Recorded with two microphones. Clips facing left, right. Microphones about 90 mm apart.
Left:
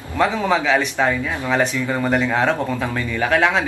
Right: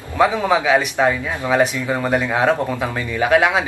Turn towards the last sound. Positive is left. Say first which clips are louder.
# right 2 dB
turn(degrees=-10)  # may be behind; listen again after turning